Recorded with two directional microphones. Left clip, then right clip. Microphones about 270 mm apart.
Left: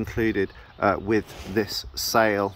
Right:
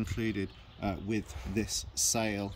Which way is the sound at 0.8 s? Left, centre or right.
Left.